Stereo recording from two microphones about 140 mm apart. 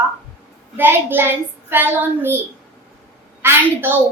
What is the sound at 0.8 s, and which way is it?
A woman's voice, 15° right (ahead or behind).